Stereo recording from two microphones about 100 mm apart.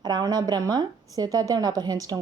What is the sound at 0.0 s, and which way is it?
A woman's voice, 45° right (ahead or behind).